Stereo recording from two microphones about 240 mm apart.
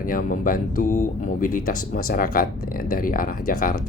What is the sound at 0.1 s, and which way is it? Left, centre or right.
Speech, left.